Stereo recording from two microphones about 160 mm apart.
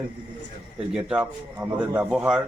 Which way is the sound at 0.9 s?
5° right (ahead or behind).